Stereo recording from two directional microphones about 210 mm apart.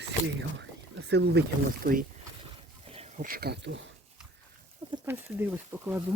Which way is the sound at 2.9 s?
30° right (ahead or behind).